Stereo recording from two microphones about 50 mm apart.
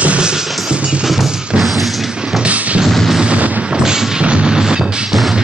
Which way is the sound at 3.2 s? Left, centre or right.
Right.